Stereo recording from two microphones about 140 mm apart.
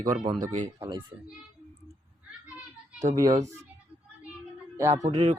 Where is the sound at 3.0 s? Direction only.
20° right (ahead or behind).